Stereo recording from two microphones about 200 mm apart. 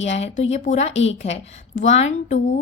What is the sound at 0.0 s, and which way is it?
A woman's voice, 30° left (ahead or behind).